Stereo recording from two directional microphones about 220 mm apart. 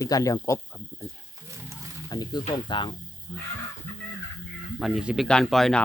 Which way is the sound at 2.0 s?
15° left (ahead or behind).